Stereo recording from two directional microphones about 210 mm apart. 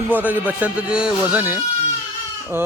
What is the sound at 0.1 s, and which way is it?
A man's voice, 10° right (ahead or behind).